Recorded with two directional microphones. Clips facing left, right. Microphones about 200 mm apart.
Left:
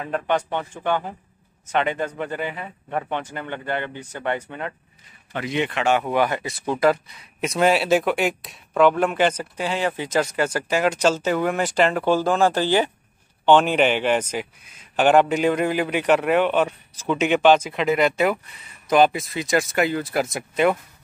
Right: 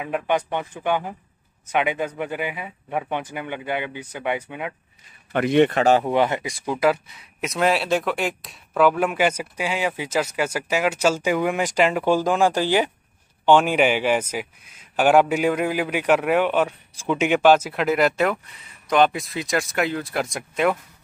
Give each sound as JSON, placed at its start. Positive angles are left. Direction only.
{"t": 0.0, "sound": "speech", "side_deg": -10}
{"t": 5.3, "sound": "a man's voice", "side_deg": -60}
{"t": 5.8, "sound": "speech", "side_deg": -35}
{"t": 6.0, "sound": "speech", "side_deg": -20}
{"t": 6.6, "sound": "speech", "side_deg": -5}